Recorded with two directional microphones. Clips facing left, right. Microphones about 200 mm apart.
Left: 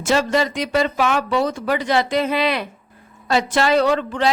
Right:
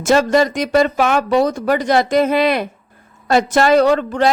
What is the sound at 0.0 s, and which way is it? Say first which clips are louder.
A woman's voice: right 5 dB; 45° right (ahead or behind).